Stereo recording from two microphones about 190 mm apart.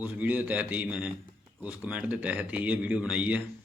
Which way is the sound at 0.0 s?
10° right (ahead or behind).